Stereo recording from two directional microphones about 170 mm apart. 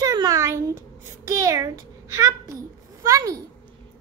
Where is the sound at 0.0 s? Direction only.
20° right (ahead or behind).